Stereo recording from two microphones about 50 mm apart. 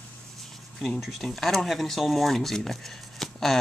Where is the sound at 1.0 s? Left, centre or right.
Centre.